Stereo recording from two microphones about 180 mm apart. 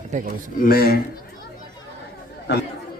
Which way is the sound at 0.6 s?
55° left (ahead or behind).